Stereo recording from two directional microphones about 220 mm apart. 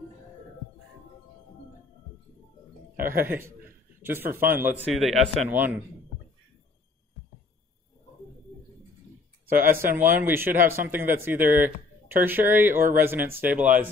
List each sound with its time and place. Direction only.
3.0 s a man's voice: 40° right (ahead or behind)
3.3 s speech: 10° right (ahead or behind)
9.7 s speech: 10° right (ahead or behind)